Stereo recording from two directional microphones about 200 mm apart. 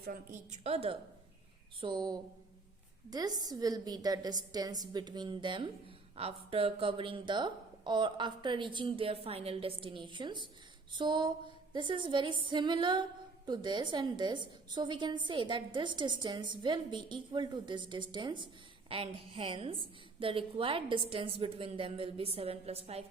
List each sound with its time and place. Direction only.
0.0 s a woman's voice: 45° right (ahead or behind)
1.8 s music: 20° right (ahead or behind)